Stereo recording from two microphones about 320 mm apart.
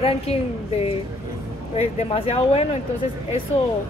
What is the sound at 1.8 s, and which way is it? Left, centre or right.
A woman's voice, centre.